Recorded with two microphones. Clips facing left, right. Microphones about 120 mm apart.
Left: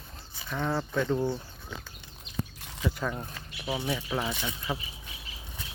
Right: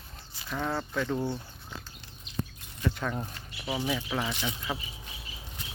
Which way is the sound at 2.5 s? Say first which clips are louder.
Right 1 dB; 90° left.